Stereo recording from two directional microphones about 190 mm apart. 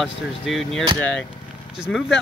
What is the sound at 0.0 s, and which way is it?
Speech, centre (ahead or behind).